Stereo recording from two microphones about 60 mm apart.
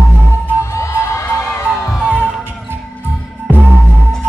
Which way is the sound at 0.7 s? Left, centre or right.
Left.